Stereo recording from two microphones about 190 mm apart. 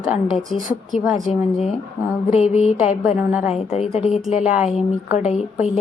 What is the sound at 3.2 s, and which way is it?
Speech, 5° right (ahead or behind).